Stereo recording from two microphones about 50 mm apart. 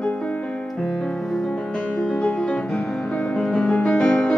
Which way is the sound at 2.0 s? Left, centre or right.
Left.